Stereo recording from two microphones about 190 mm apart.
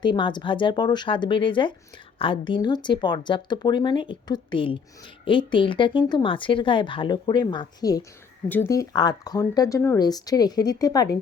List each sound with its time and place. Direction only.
0.0 s speech: 25° left (ahead or behind)